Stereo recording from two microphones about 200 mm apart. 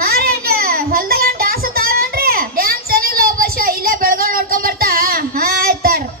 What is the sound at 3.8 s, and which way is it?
Child singing, 45° right (ahead or behind).